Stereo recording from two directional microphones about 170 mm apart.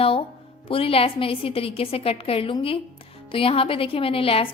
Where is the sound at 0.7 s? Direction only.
35° left (ahead or behind).